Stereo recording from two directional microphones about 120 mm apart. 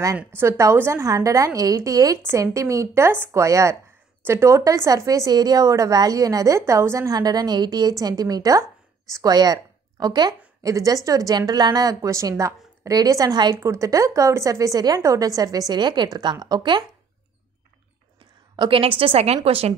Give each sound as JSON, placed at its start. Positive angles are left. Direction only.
{"t": 0.4, "sound": "a woman's voice", "side_deg": -25}
{"t": 13.6, "sound": "a woman's voice", "side_deg": -25}
{"t": 18.6, "sound": "a woman's voice", "side_deg": -50}